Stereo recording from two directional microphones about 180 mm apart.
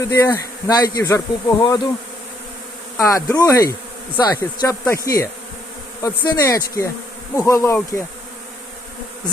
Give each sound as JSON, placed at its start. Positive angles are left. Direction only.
{"t": 0.0, "sound": "speech", "side_deg": 15}
{"t": 3.0, "sound": "speech", "side_deg": 15}